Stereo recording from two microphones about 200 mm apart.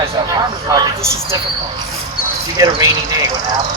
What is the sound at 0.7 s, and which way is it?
Speech, 20° right (ahead or behind).